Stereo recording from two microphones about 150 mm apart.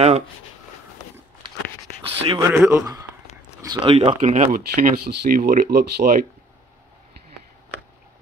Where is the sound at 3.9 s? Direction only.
45° right (ahead or behind).